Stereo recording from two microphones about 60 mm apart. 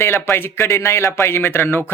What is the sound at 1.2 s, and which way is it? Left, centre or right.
Speech, left.